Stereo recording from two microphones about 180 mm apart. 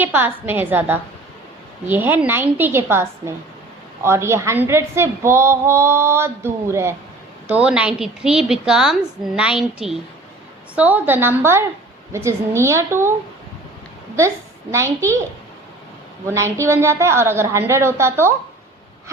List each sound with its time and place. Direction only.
0.0 s a woman's voice: 10° right (ahead or behind)
14.2 s a woman's voice: 15° right (ahead or behind)
16.2 s a woman's voice: 15° right (ahead or behind)